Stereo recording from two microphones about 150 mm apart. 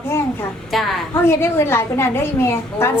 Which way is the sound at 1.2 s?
15° left (ahead or behind).